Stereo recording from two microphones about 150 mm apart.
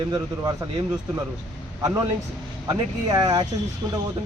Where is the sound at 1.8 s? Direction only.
20° right (ahead or behind).